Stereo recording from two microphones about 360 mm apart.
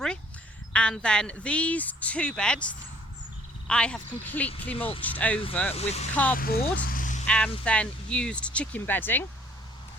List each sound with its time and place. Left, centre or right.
0.7 s speech: centre
5.7 s speech: centre
7.3 s speech: centre